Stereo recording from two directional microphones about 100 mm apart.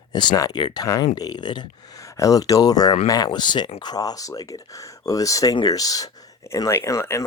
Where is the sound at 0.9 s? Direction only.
40° left (ahead or behind).